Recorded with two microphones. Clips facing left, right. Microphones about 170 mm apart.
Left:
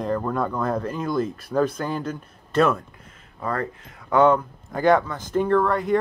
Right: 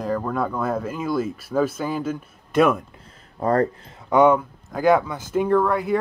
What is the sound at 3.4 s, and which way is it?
Speech, 40° right (ahead or behind).